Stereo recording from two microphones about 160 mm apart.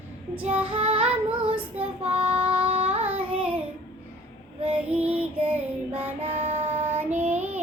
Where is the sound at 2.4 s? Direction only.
35° right (ahead or behind).